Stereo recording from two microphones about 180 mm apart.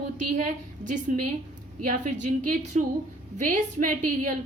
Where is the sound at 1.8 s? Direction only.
45° right (ahead or behind).